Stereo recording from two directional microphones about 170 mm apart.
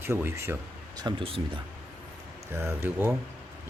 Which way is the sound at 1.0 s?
30° right (ahead or behind).